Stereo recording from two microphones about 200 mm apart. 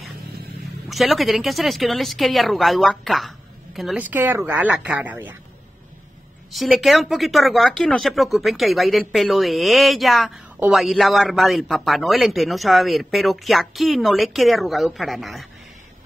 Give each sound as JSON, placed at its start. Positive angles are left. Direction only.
{"t": 0.8, "sound": "speech", "side_deg": 0}
{"t": 6.5, "sound": "speech", "side_deg": 0}